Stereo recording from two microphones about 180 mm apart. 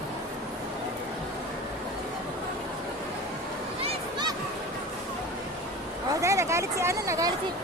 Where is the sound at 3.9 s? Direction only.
25° right (ahead or behind).